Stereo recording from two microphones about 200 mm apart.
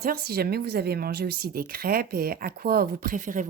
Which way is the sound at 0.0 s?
50° right (ahead or behind).